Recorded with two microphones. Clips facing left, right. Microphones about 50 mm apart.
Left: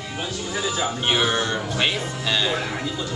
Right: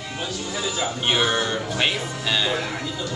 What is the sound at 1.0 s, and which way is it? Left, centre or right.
Speech, centre.